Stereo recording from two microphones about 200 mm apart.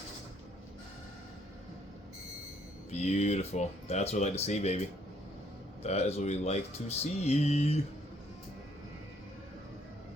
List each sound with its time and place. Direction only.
2.9 s speech: 35° left (ahead or behind)
5.8 s speech: 30° left (ahead or behind)